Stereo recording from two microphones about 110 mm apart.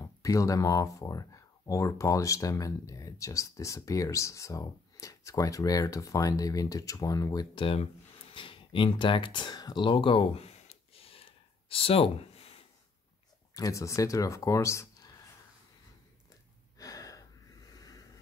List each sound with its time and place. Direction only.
0.0 s speech: 30° left (ahead or behind)
7.5 s a sound: 55° left (ahead or behind)
13.6 s speech: 30° left (ahead or behind)
16.7 s gasp: 35° left (ahead or behind)
17.7 s vehicle: 35° left (ahead or behind)